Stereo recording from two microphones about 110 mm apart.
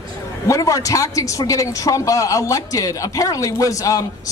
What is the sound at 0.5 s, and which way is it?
A man's voice, 30° left (ahead or behind).